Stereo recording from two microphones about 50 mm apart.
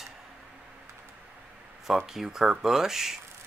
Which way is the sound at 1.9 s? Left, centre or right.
Centre.